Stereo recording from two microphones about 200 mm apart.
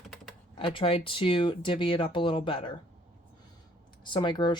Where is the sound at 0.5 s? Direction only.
25° left (ahead or behind).